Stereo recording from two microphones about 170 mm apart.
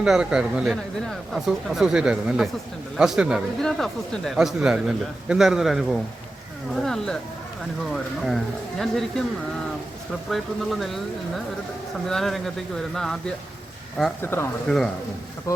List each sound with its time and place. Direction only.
0.0 s speech: 5° right (ahead or behind)
10.2 s speech: centre (ahead or behind)
12.0 s speech: centre (ahead or behind)
14.2 s speech: 15° left (ahead or behind)
15.5 s speech: 20° left (ahead or behind)